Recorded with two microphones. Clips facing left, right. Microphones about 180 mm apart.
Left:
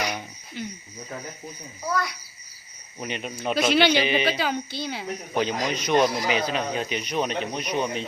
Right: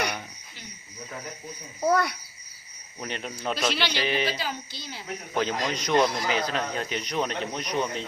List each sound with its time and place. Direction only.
1.8 s speech: 55° right (ahead or behind)
3.0 s a woman's voice: 15° left (ahead or behind)
3.7 s a woman's voice: 55° left (ahead or behind)
3.9 s a woman's voice: 20° left (ahead or behind)
4.3 s a woman's voice: 65° left (ahead or behind)
5.3 s speech: 15° left (ahead or behind)